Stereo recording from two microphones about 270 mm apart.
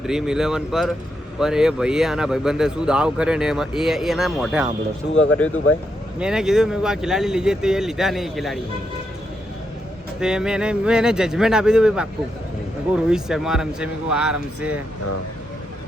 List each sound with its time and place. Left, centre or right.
0.0 s speech: centre
5.1 s speech: left
6.1 s speech: centre
10.2 s speech: centre
13.1 s speech: centre